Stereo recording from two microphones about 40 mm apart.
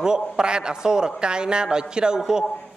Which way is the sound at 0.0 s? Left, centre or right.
Centre.